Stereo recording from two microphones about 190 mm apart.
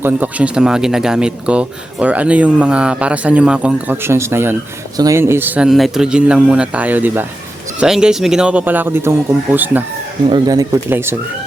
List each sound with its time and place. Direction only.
0.0 s speech: 10° right (ahead or behind)
10.2 s speech: 25° right (ahead or behind)